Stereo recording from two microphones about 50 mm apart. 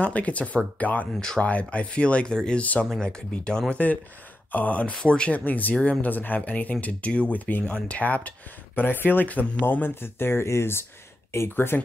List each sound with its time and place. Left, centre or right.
0.0 s speech: left
3.7 s speech: left
4.9 s speech: centre
5.3 s speech: left
9.8 s speech: left